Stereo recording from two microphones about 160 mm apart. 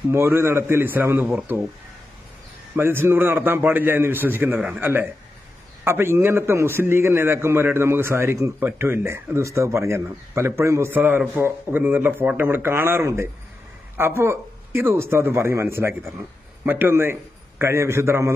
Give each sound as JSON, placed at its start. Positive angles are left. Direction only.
{"t": 0.1, "sound": "a man's voice", "side_deg": -15}
{"t": 2.7, "sound": "a man's voice", "side_deg": -15}